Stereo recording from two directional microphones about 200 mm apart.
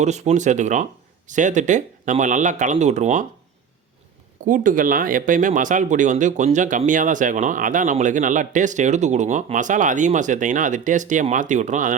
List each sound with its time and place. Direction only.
0.0 s speech: 35° right (ahead or behind)
4.4 s speech: 40° right (ahead or behind)